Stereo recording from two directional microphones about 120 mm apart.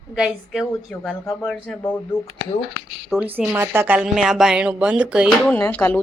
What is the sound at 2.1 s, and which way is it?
Speech, 45° left (ahead or behind).